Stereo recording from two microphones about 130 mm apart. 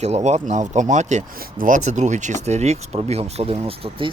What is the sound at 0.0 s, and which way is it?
Speech, 60° right (ahead or behind).